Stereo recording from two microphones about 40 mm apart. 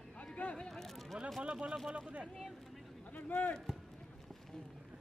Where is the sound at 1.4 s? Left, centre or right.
Right.